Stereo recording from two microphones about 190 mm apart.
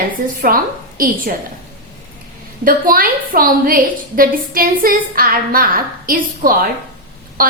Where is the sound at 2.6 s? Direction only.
50° right (ahead or behind).